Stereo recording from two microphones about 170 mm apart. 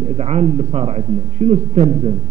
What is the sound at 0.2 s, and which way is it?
A man's voice, 40° right (ahead or behind).